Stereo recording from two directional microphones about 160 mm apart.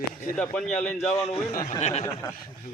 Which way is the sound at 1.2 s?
45° left (ahead or behind).